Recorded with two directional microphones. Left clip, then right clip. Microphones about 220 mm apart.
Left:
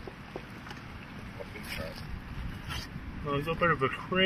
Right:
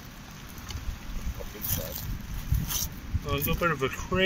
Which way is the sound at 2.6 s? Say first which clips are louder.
Right 6 dB; 55° right (ahead or behind).